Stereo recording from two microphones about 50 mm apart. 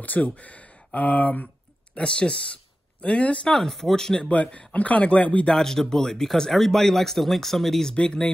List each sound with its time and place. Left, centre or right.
0.0 s speech: left
2.0 s speech: left
3.4 s speech: centre
4.3 s speech: left
5.5 s speech: centre
7.9 s speech: left